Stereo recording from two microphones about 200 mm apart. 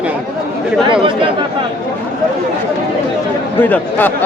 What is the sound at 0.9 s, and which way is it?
Speech, 25° right (ahead or behind).